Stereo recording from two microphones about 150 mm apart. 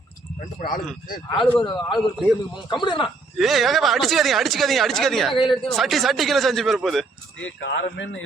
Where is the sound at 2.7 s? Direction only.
30° left (ahead or behind).